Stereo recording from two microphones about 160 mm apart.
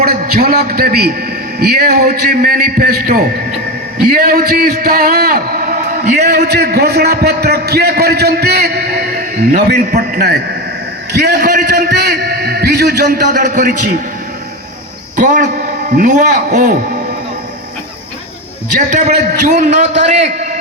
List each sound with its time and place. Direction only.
0.0 s a man's voice: 70° right (ahead or behind); by 6.1 s 50° right (ahead or behind)
6.3 s a man's voice: 90° right
9.5 s a man's voice: 55° right (ahead or behind); by 13.1 s 90° right
13.2 s a man's voice: 55° right (ahead or behind)
15.1 s a man's voice: 50° right (ahead or behind)
18.9 s a man's voice: 50° right (ahead or behind)